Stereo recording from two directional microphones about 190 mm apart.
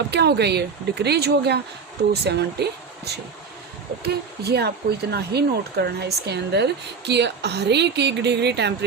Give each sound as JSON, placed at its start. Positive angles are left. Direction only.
{"t": 0.1, "sound": "speech", "side_deg": -60}